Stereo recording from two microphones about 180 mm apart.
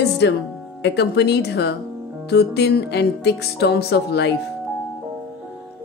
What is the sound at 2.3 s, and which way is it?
Music, 65° left (ahead or behind).